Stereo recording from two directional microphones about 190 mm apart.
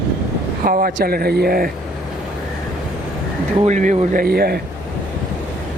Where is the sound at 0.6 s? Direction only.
50° right (ahead or behind).